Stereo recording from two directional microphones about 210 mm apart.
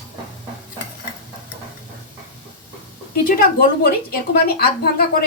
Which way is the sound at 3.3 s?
45° left (ahead or behind).